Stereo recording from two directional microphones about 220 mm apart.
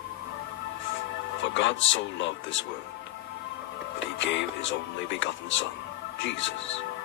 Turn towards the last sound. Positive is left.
turn(degrees=55)  # may be behind; listen again after turning